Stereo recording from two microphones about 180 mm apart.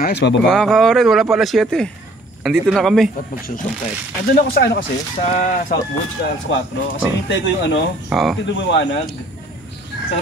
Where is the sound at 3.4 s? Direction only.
50° left (ahead or behind).